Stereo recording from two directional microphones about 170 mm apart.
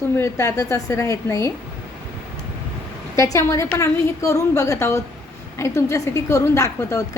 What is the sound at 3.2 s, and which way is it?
A woman's voice, 15° left (ahead or behind).